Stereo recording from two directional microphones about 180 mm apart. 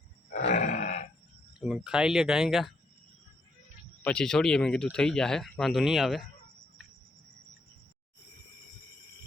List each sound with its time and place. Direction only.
0.3 s grunt: 45° left (ahead or behind)
1.5 s speech: 5° right (ahead or behind)
4.0 s speech: 5° left (ahead or behind)